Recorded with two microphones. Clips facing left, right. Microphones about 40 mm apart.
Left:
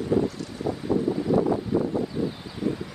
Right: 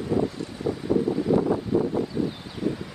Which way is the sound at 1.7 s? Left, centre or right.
Centre.